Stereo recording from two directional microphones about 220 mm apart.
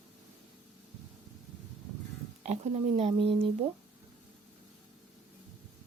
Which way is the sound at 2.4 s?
30° right (ahead or behind).